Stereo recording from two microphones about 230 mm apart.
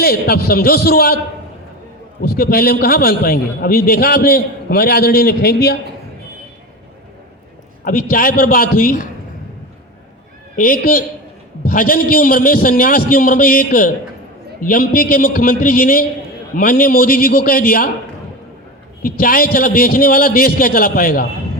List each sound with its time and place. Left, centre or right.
0.0 s a man's voice: left
2.2 s a man's voice: left
7.9 s a man's voice: left
10.6 s a man's voice: left
19.0 s a man's voice: left